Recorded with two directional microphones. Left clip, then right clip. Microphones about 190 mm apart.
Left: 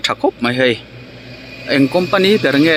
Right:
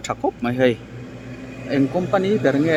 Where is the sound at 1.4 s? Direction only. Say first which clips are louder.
Left 7 dB; 55° right (ahead or behind).